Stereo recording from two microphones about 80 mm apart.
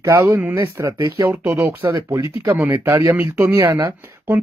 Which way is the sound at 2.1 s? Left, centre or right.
Right.